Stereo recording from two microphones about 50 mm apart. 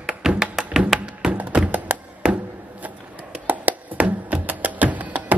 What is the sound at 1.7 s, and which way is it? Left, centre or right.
Music, right.